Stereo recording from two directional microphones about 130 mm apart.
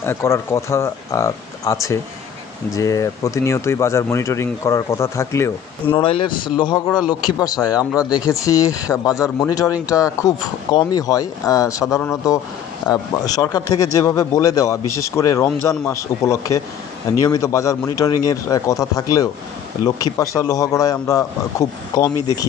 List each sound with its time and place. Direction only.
0.0 s speech: 20° left (ahead or behind)
6.0 s speech: 40° left (ahead or behind)
12.8 s speech: 30° left (ahead or behind)